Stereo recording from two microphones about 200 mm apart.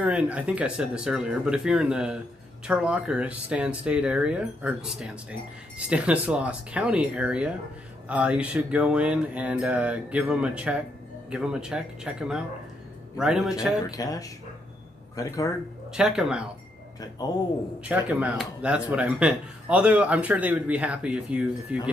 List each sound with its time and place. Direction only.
0.0 s speech: 5° right (ahead or behind)
13.8 s speech: 20° left (ahead or behind)
15.9 s speech: 5° right (ahead or behind)
17.2 s a man's voice: 20° left (ahead or behind)
17.8 s speech: 5° right (ahead or behind)